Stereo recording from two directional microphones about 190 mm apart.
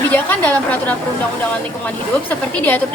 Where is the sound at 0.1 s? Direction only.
10° left (ahead or behind).